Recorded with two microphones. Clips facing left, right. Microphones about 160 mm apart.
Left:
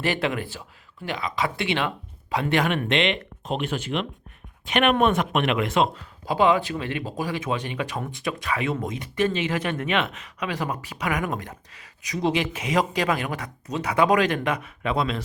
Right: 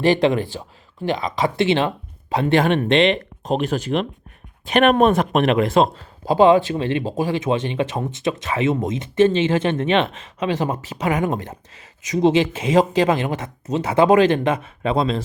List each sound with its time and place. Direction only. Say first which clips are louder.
0.0 s speech: right 9 dB; 25° right (ahead or behind)